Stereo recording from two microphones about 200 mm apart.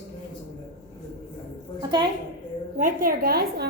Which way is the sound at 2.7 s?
45° right (ahead or behind).